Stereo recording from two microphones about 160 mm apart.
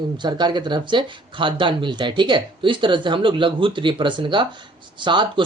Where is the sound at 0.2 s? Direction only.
30° right (ahead or behind).